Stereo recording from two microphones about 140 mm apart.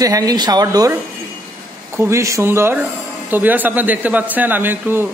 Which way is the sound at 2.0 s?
20° right (ahead or behind).